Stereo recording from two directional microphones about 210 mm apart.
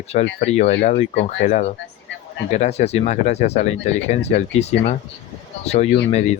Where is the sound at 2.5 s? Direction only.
30° left (ahead or behind).